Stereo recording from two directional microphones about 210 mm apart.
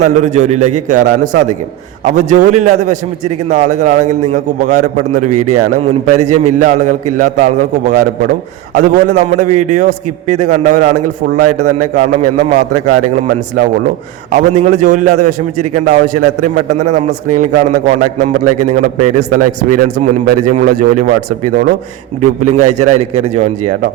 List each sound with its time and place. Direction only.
0.0 s a man's voice: 35° right (ahead or behind)
14.3 s a man's voice: 35° right (ahead or behind)
22.2 s a man's voice: 35° right (ahead or behind)